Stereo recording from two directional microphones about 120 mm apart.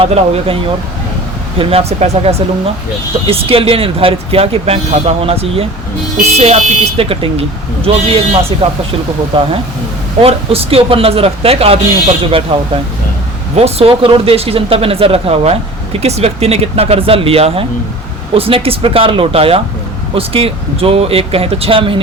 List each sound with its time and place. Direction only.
0.0 s speech: 50° right (ahead or behind)
13.6 s speech: 55° right (ahead or behind)